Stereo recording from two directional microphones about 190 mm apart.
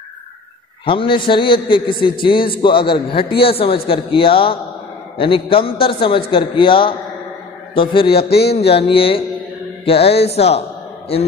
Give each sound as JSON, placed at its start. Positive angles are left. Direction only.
{"t": 0.8, "sound": "a man's voice", "side_deg": 25}
{"t": 8.3, "sound": "a sound", "side_deg": 60}
{"t": 8.5, "sound": "a man's voice", "side_deg": 30}